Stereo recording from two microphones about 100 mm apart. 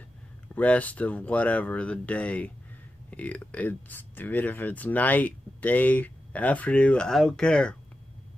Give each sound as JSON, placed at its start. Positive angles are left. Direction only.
{"t": 0.6, "sound": "speech", "side_deg": 15}